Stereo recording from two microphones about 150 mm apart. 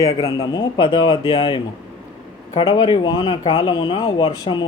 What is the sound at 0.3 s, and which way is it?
Speech, 30° left (ahead or behind).